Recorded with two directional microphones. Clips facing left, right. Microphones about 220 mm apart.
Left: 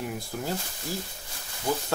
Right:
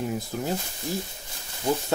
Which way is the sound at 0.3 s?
20° right (ahead or behind).